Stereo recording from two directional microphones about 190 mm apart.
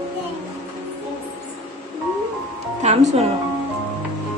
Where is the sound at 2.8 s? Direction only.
35° right (ahead or behind).